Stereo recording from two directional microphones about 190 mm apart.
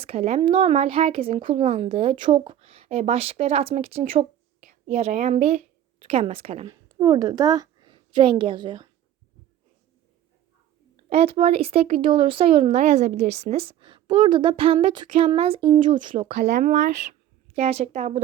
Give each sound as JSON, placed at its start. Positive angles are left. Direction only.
{"t": 0.0, "sound": "speech", "side_deg": -30}
{"t": 6.7, "sound": "a woman's voice", "side_deg": -20}
{"t": 11.1, "sound": "speech", "side_deg": -30}
{"t": 16.6, "sound": "speech", "side_deg": -40}